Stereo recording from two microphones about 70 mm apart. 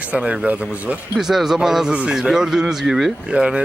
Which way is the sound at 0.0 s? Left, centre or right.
Centre.